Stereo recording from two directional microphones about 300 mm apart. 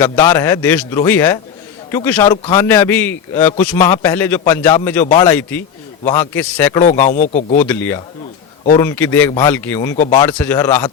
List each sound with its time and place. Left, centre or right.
0.0 s a man's voice: centre
7.1 s a man's voice: left
7.5 s a man's voice: centre